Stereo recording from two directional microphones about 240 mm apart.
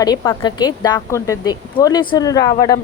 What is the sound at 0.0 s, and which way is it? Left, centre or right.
Speech, centre.